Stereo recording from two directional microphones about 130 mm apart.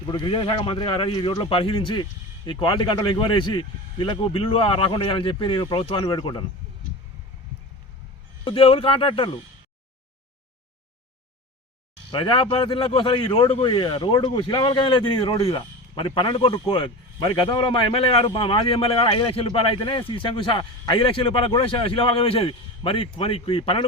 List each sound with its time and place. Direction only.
0.1 s speech: 35° left (ahead or behind)
8.4 s speech: 45° left (ahead or behind)
12.1 s speech: 40° left (ahead or behind)